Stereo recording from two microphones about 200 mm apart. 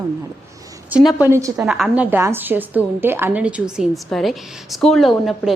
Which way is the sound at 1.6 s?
5° right (ahead or behind).